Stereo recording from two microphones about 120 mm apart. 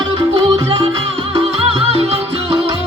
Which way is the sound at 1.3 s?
55° right (ahead or behind).